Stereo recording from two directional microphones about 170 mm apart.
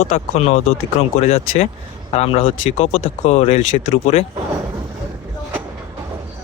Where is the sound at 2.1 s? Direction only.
35° left (ahead or behind).